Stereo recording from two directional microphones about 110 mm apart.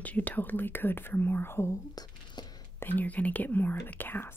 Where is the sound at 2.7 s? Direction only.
15° left (ahead or behind).